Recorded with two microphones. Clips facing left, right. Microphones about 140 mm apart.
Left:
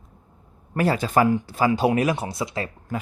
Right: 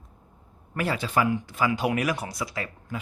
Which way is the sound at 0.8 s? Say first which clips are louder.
Left 6 dB; 40° left (ahead or behind).